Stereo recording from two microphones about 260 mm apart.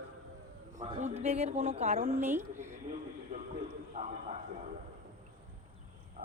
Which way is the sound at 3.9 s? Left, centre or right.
Right.